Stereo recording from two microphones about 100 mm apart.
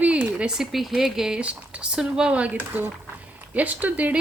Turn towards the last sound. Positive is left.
turn(degrees=-15)  # may be behind; listen again after turning